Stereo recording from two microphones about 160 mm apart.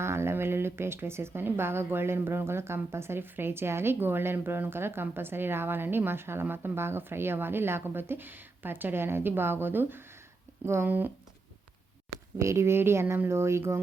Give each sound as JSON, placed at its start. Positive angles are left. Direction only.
{"t": 0.0, "sound": "speech", "side_deg": -15}
{"t": 12.4, "sound": "speech", "side_deg": -15}